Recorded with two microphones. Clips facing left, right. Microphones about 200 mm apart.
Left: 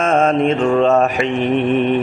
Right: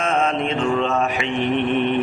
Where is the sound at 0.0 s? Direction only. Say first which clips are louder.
Left 6 dB; 45° left (ahead or behind).